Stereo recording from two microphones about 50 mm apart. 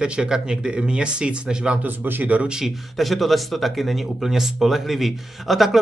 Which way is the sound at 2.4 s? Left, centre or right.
Centre.